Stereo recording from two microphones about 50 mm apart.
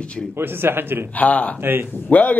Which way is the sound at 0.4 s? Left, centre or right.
Right.